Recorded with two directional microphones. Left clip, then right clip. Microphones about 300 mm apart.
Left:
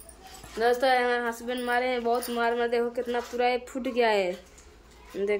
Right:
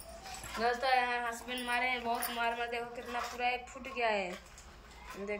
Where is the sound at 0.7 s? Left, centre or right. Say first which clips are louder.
Left 8 dB; left.